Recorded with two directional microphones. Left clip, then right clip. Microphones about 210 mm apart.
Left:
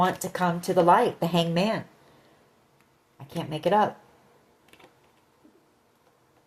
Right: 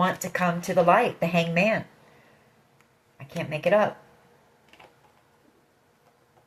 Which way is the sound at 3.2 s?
45° left (ahead or behind).